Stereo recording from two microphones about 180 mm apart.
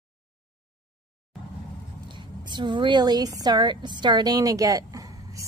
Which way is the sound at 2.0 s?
25° right (ahead or behind).